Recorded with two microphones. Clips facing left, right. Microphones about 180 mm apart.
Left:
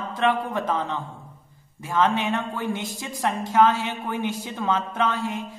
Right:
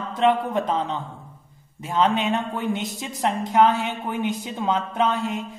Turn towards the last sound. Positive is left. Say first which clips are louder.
# right 2 dB
turn(degrees=-20)  # may be behind; listen again after turning